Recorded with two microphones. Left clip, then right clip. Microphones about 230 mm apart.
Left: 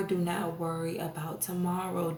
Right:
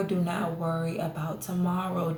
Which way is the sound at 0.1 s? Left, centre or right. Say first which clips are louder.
Right 1 dB; left.